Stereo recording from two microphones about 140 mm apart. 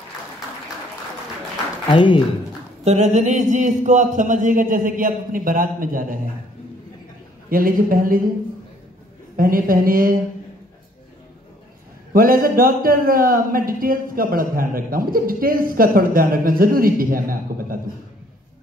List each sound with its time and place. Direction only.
1.9 s speech: 35° left (ahead or behind)
2.8 s speech: 50° right (ahead or behind); by 6.1 s 80° right
7.4 s speech: 90° right
9.4 s speech: 90° right
12.1 s speech: 90° right